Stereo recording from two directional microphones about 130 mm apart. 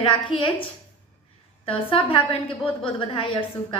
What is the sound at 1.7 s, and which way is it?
A woman's voice, 45° left (ahead or behind).